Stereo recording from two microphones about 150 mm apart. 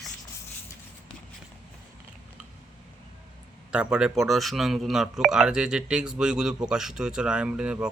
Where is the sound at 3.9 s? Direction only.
5° right (ahead or behind).